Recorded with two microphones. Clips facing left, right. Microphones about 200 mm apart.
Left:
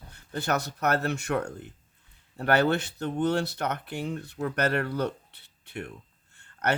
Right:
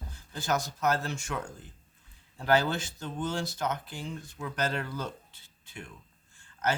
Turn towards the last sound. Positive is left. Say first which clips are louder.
# left 3 dB
turn(degrees=65)  # may be behind; listen again after turning